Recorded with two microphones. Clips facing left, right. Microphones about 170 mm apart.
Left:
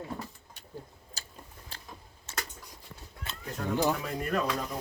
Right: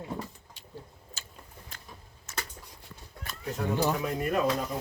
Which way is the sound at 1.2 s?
35° left (ahead or behind).